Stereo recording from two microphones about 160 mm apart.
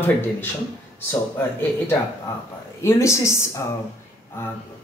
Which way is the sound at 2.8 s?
20° left (ahead or behind).